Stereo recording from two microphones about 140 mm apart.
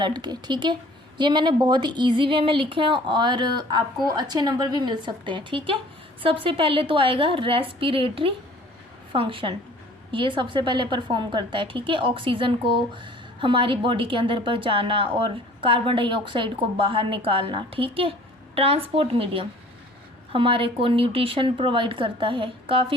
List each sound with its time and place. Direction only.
0.0 s a woman's voice: 30° right (ahead or behind)